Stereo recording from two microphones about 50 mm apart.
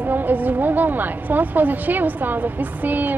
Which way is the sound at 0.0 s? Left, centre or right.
Right.